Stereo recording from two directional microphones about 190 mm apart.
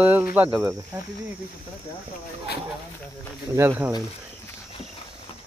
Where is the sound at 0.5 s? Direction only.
20° right (ahead or behind).